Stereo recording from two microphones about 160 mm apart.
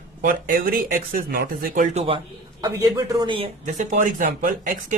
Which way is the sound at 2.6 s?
25° right (ahead or behind).